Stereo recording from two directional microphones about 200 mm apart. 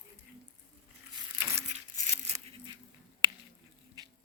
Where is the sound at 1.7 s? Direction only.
35° right (ahead or behind).